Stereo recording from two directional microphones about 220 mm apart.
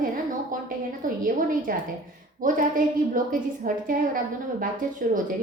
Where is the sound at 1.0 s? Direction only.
40° right (ahead or behind).